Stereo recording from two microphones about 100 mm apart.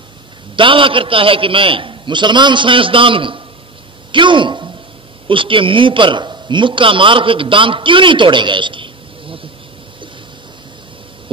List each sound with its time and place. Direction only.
0.6 s a man's voice: 60° right (ahead or behind)